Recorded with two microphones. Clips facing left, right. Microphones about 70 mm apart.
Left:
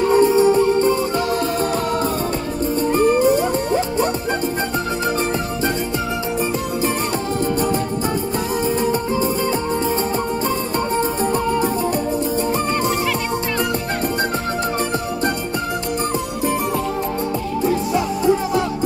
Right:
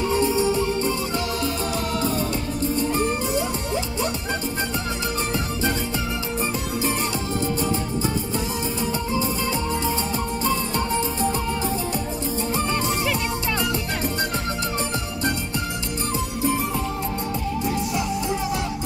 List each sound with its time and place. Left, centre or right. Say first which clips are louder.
0.0 s music: left 8 dB; left
2.9 s music: left 8 dB; left
11.0 s music: left 5 dB; left
17.6 s music: left 8 dB; left